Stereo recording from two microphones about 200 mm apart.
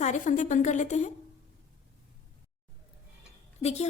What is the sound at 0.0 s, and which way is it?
A woman's voice, 35° left (ahead or behind).